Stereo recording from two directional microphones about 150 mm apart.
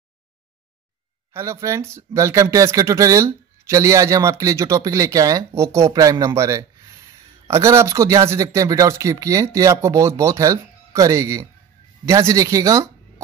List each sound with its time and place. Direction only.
1.3 s speech: 20° right (ahead or behind)